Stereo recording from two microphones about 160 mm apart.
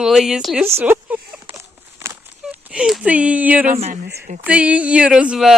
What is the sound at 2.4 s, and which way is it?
Speech, 5° right (ahead or behind).